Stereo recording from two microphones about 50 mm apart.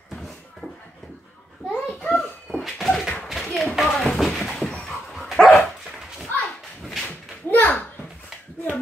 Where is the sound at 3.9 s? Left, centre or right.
Centre.